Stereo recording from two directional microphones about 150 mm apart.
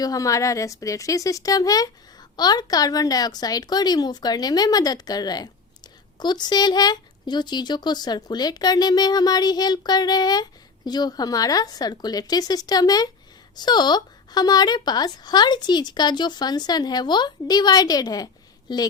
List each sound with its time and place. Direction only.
0.0 s speech: 20° left (ahead or behind)